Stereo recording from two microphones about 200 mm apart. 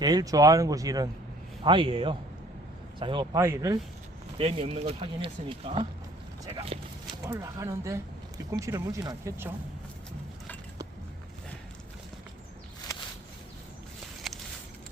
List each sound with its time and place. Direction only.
0.0 s speech: 20° right (ahead or behind)
4.4 s speech: 30° right (ahead or behind)
7.3 s speech: 15° right (ahead or behind)
14.3 s a sound: centre (ahead or behind)